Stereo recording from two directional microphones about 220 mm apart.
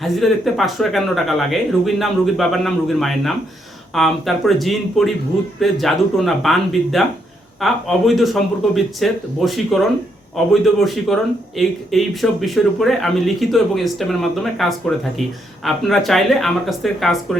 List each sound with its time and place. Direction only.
0.0 s a man's voice: centre (ahead or behind)